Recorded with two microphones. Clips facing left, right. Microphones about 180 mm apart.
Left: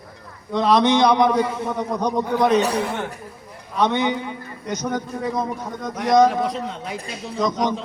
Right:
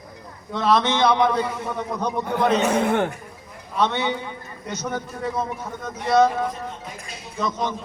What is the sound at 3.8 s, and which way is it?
A man's voice, 15° left (ahead or behind).